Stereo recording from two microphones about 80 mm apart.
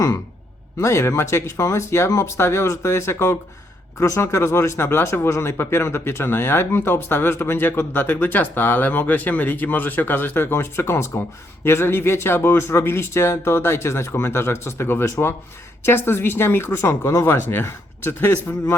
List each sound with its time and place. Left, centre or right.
0.8 s speech: left